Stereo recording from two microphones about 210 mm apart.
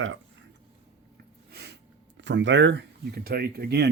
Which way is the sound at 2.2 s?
60° right (ahead or behind).